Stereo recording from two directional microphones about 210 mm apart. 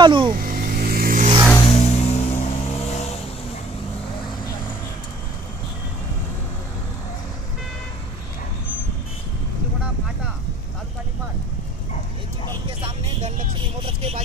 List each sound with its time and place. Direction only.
0.0 s vehicle: 25° right (ahead or behind)
0.5 s vehicle: 45° right (ahead or behind)
1.7 s vehicle: 30° left (ahead or behind)
13.8 s vehicle: 30° right (ahead or behind)